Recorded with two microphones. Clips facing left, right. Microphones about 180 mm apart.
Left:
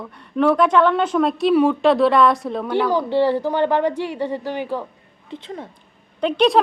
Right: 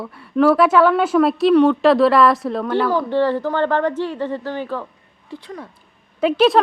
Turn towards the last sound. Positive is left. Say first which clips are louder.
# right 2 dB
turn(degrees=-5)  # may be behind; listen again after turning